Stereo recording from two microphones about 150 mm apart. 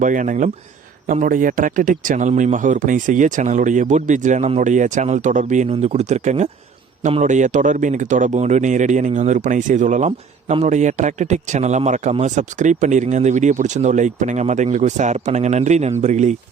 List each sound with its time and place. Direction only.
0.0 s speech: 60° right (ahead or behind)
10.1 s a man's voice: 40° right (ahead or behind)